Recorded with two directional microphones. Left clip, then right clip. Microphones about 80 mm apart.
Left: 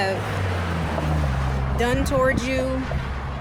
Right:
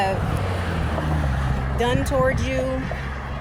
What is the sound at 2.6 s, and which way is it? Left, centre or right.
Speech, left.